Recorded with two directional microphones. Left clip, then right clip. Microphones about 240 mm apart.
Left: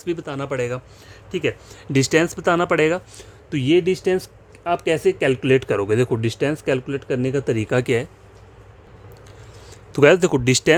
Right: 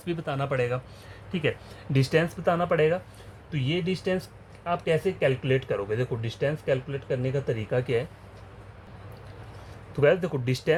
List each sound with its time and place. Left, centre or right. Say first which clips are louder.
0.0 s speech: left 4 dB; left
9.9 s speech: left 9 dB; left